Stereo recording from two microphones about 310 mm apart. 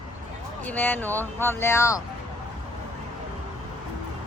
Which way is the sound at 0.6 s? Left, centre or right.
Centre.